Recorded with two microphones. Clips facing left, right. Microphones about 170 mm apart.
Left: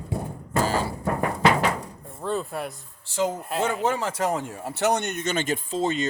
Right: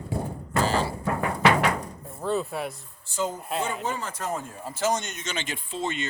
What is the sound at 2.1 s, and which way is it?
Speech, centre (ahead or behind).